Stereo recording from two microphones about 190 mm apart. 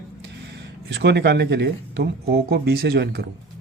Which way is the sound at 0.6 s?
65° right (ahead or behind).